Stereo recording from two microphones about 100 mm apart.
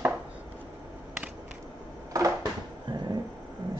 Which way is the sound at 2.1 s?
35° right (ahead or behind).